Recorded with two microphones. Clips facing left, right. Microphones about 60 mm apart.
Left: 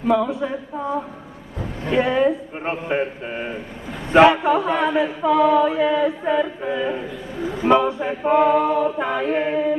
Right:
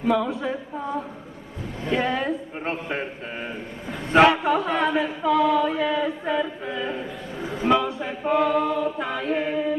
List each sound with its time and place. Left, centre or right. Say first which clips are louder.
0.1 s a sound: left 4 dB; centre
1.9 s chant: left 6 dB; centre
7.7 s a capella: left 5 dB; left